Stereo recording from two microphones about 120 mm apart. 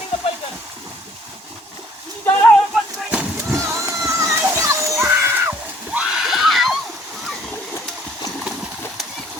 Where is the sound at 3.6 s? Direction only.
25° right (ahead or behind).